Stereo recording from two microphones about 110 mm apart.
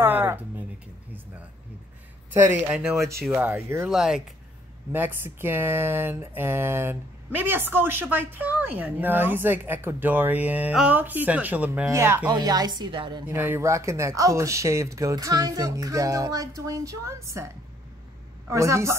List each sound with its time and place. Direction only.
0.0 s a sound: 20° right (ahead or behind)
2.3 s speech: 25° right (ahead or behind)
3.9 s speech: 5° right (ahead or behind)
4.9 s a woman's voice: 20° right (ahead or behind)
11.9 s speech: 25° right (ahead or behind)
12.3 s a woman's voice: 35° right (ahead or behind)
13.3 s speech: 20° right (ahead or behind)
18.5 s speech: 25° right (ahead or behind)